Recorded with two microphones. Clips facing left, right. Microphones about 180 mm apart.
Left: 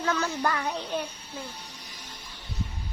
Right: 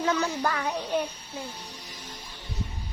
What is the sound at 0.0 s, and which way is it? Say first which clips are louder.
Child singing: right 2 dB; 15° right (ahead or behind).